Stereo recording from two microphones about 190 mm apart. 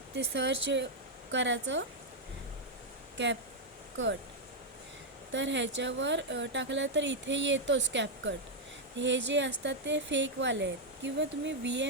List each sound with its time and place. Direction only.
0.3 s speech: 70° right (ahead or behind)
3.9 s speech: 80° right
5.3 s speech: 75° right (ahead or behind)